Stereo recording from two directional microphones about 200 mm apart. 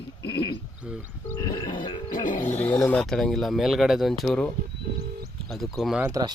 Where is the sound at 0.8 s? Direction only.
5° right (ahead or behind).